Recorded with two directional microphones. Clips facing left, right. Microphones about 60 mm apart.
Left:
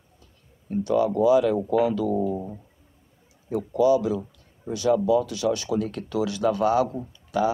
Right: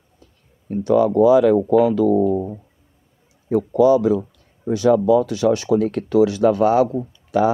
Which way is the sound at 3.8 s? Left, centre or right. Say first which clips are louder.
Right 5 dB; right.